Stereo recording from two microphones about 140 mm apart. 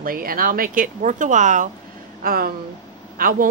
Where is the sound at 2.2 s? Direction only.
90° right.